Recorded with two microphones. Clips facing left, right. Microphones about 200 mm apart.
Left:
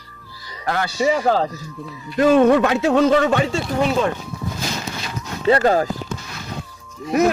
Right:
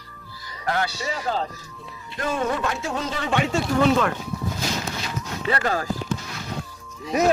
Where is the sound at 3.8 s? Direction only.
25° left (ahead or behind).